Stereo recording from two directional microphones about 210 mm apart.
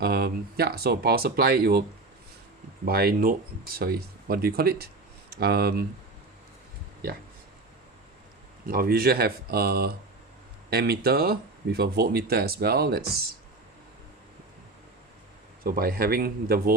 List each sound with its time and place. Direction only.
0.0 s speech: 50° right (ahead or behind)
2.8 s speech: 45° right (ahead or behind)
8.6 s speech: 45° right (ahead or behind)
15.6 s speech: 45° right (ahead or behind)